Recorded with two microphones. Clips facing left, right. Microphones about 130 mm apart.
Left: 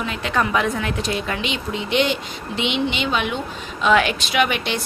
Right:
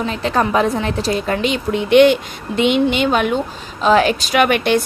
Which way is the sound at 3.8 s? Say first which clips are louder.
Right 4 dB; 35° right (ahead or behind).